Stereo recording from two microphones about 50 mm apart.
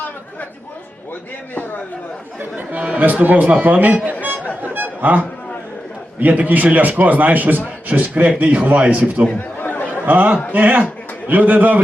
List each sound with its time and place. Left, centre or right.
2.4 s speech: right
4.6 s a sound: right
6.1 s a man's voice: right
9.6 s chatter: left
9.9 s speech: right